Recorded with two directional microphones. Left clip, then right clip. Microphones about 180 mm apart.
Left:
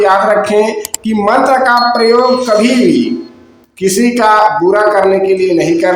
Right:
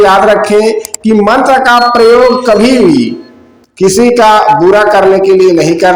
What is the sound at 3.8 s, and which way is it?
A man's voice, 25° right (ahead or behind).